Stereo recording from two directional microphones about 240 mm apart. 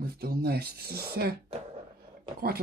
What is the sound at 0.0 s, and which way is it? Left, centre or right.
Speech, right.